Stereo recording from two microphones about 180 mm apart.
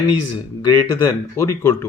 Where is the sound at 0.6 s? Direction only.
20° left (ahead or behind).